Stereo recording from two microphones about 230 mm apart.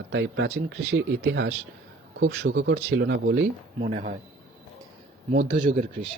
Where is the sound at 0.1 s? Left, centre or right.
Right.